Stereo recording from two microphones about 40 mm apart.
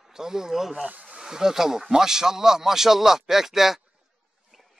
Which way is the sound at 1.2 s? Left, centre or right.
Centre.